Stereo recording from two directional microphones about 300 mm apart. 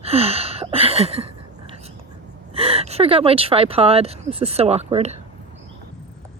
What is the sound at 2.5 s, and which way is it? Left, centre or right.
A woman's voice, centre.